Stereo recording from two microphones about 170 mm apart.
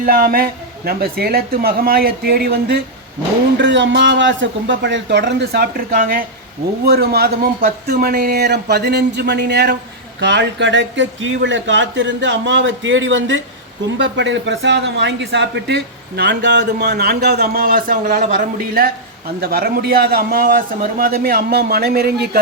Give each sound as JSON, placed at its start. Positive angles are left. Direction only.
{"t": 0.0, "sound": "a man's voice", "side_deg": -60}
{"t": 3.6, "sound": "speech", "side_deg": -90}
{"t": 6.8, "sound": "a man's voice", "side_deg": -70}